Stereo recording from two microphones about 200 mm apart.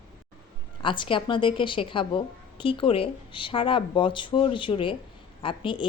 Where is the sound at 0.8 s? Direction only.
25° left (ahead or behind).